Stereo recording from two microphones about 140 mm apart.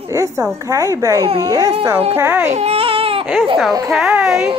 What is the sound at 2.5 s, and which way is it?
Baby cry, 50° right (ahead or behind).